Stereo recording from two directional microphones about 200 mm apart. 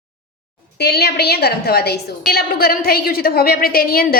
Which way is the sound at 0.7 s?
55° left (ahead or behind).